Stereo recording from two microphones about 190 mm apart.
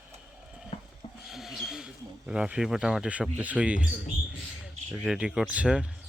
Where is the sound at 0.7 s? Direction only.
35° left (ahead or behind).